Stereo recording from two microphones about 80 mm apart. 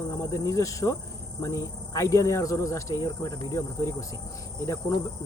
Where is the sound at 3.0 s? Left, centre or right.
Left.